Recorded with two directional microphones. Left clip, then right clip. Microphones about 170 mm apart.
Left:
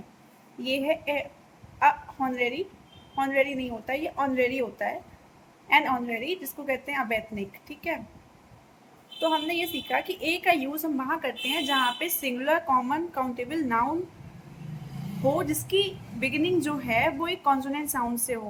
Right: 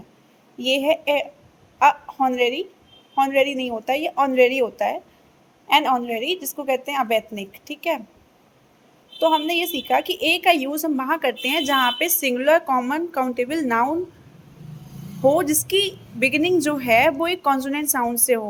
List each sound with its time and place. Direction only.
0.6 s a woman's voice: 45° right (ahead or behind)
9.2 s a woman's voice: 45° right (ahead or behind)
15.4 s a woman's voice: 50° right (ahead or behind)